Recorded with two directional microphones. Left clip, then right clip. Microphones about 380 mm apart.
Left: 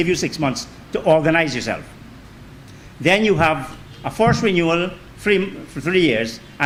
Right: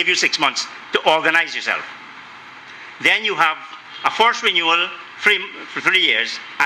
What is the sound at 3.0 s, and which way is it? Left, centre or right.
A man's voice, centre.